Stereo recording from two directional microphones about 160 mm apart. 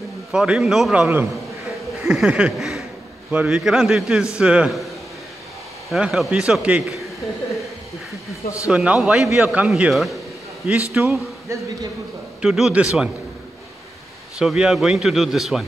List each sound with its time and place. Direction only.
0.3 s a man's voice: 5° right (ahead or behind)
2.0 s a sound: 5° right (ahead or behind)
3.3 s a man's voice: 5° right (ahead or behind)
5.9 s a man's voice: centre (ahead or behind)
8.6 s a man's voice: 5° right (ahead or behind)
11.4 s speech: 20° right (ahead or behind)
12.4 s a man's voice: 5° right (ahead or behind)
14.4 s a man's voice: 5° right (ahead or behind)